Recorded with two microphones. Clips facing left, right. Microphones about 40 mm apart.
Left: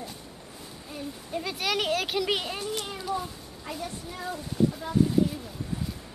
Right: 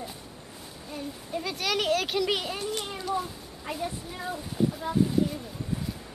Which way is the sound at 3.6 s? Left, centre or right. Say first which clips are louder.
Right 3 dB; centre.